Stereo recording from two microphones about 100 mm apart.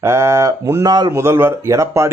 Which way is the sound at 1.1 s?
25° right (ahead or behind).